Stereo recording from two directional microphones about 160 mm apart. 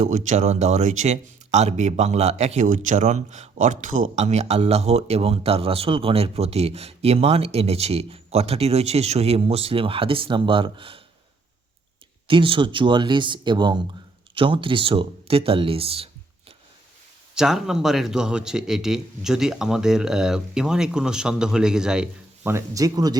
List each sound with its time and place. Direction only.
0.0 s speech: 45° right (ahead or behind)
12.3 s speech: 30° right (ahead or behind)
17.3 s speech: centre (ahead or behind)
22.5 s speech: 20° right (ahead or behind)